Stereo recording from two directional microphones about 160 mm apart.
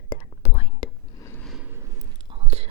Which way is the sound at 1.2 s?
15° left (ahead or behind).